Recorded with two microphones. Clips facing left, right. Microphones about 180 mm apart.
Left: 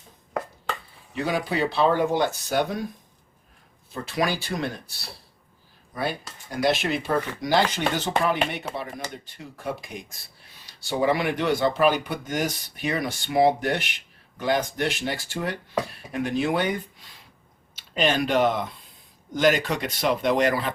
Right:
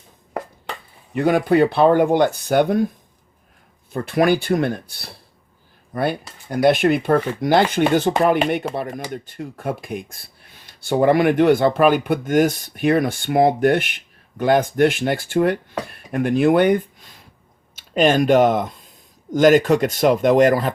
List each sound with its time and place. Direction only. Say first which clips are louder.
1.1 s speech: right 10 dB; 55° right (ahead or behind)
3.9 s speech: right 9 dB; 55° right (ahead or behind)